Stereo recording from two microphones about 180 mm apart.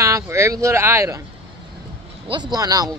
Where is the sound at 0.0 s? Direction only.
15° right (ahead or behind).